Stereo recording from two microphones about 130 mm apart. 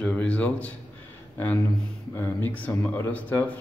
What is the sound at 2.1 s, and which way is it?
Speech, 15° left (ahead or behind).